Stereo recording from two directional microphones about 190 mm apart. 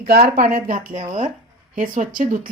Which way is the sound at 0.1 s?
50° right (ahead or behind).